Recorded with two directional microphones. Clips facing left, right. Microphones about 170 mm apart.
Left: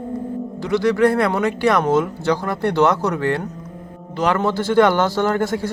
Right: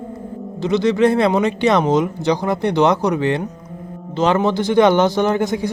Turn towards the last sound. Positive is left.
turn(degrees=-20)  # may be behind; listen again after turning